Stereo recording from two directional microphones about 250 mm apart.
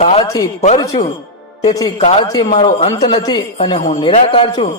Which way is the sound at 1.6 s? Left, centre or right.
Centre.